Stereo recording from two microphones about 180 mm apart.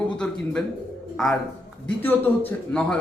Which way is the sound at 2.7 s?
5° left (ahead or behind).